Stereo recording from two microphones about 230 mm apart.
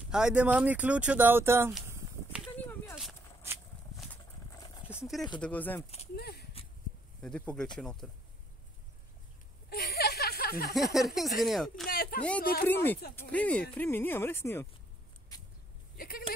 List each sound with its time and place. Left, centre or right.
0.1 s speech: centre
3.0 s a sound: centre
3.9 s clip-clop: centre
5.0 s speech: centre
6.1 s speech: left
7.2 s speech: centre
9.7 s a sound: left
10.7 s speech: centre
11.9 s a sound: left
12.6 s speech: centre
16.0 s speech: left